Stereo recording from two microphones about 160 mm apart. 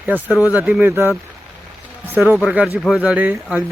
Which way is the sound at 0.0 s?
10° right (ahead or behind).